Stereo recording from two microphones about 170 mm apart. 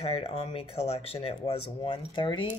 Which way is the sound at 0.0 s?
35° left (ahead or behind).